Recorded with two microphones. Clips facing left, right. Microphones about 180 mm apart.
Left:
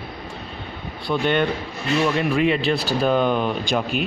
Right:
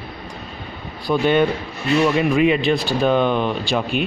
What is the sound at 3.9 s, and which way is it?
Speech, 40° left (ahead or behind).